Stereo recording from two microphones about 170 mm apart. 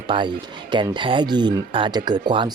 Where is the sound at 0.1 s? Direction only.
25° right (ahead or behind).